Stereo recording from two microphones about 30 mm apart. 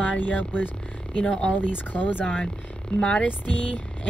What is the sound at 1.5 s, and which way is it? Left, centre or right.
Speech, left.